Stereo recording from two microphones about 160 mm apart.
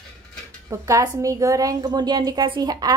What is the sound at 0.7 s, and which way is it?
A woman's voice, 20° right (ahead or behind).